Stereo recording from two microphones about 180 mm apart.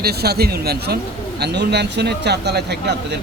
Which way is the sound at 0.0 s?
60° right (ahead or behind).